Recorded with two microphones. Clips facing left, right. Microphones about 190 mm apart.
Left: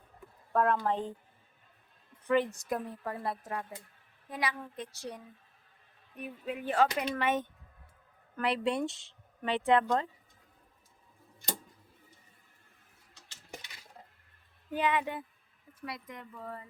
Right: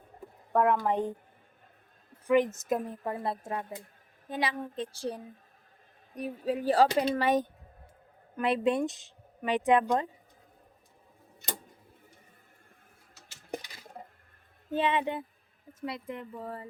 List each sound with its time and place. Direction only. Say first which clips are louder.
0.5 s speech: right 3 dB; 15° right (ahead or behind)
2.2 s a woman's voice: right 4 dB; 15° right (ahead or behind); by 7.4 s 35° right (ahead or behind)
8.4 s speech: right 4 dB; 20° right (ahead or behind)
13.6 s a sound: right 5 dB; 40° right (ahead or behind)
14.7 s speech: right 3 dB; 25° right (ahead or behind)